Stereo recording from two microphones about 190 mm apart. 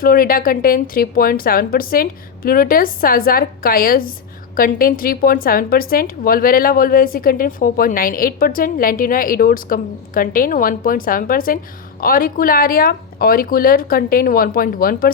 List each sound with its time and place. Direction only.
0.0 s a woman's voice: 50° left (ahead or behind)